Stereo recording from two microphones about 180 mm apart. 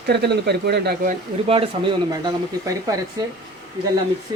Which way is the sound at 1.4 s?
30° right (ahead or behind).